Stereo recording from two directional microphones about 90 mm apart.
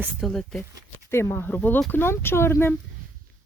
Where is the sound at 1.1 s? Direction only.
25° left (ahead or behind).